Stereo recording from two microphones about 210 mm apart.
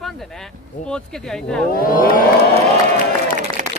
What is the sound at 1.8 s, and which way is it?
Speech, 40° left (ahead or behind).